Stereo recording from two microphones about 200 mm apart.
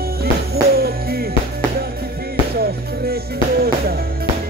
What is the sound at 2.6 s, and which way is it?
Music, 50° right (ahead or behind).